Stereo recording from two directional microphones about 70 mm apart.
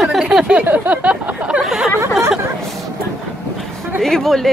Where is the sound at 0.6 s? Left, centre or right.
Right.